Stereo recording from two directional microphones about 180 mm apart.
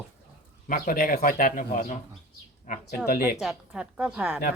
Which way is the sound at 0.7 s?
50° left (ahead or behind).